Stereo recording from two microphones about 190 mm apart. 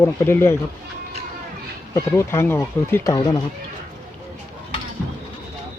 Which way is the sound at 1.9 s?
15° left (ahead or behind).